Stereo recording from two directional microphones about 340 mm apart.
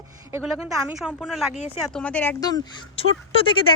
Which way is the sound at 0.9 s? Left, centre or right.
Centre.